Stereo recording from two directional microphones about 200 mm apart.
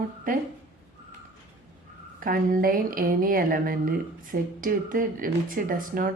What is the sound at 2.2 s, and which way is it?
Speech, 45° right (ahead or behind).